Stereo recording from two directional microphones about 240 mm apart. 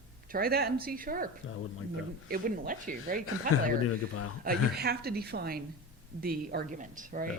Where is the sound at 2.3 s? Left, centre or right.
Right.